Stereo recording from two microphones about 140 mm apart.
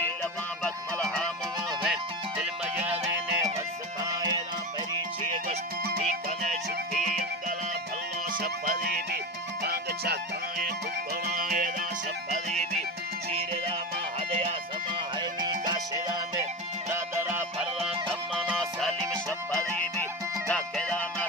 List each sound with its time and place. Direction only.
0.2 s music: 5° left (ahead or behind)
2.4 s music: 10° right (ahead or behind)
4.0 s music: 30° right (ahead or behind)
6.0 s music: 55° right (ahead or behind)
8.3 s music: 85° right
11.3 s music: 90° right
12.3 s music: 55° right (ahead or behind)
15.2 s music: 30° right (ahead or behind)
16.9 s music: 20° right (ahead or behind)
18.5 s music: centre (ahead or behind)
20.5 s music: 10° left (ahead or behind)